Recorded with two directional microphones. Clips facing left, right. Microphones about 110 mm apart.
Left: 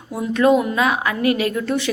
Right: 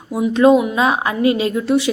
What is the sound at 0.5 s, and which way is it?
Speech, 10° right (ahead or behind).